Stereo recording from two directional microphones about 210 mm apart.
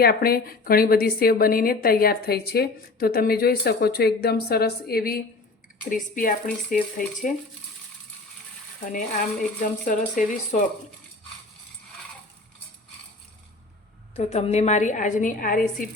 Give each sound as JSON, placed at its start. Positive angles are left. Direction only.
{"t": 0.0, "sound": "a woman's voice", "side_deg": 45}
{"t": 8.9, "sound": "speech", "side_deg": 40}
{"t": 14.2, "sound": "speech", "side_deg": 30}